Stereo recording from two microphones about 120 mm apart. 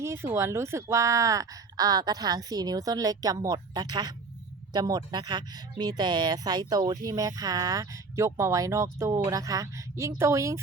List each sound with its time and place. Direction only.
0.0 s a woman's voice: 20° right (ahead or behind)